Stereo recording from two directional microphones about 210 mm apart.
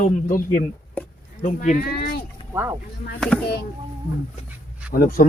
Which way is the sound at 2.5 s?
15° right (ahead or behind).